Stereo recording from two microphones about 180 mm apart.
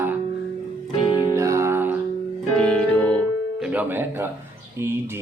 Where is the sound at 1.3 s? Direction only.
15° right (ahead or behind).